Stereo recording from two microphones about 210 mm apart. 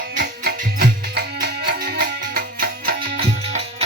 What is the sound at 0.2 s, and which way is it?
Music, 45° right (ahead or behind).